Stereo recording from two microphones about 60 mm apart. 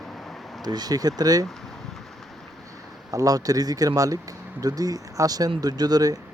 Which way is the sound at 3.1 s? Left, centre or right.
Right.